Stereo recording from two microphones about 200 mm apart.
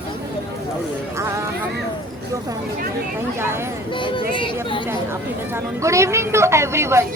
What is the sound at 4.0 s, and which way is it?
Speech, 25° left (ahead or behind).